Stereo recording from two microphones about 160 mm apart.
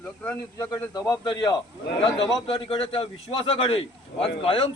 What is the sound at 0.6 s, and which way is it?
Speech, 20° left (ahead or behind).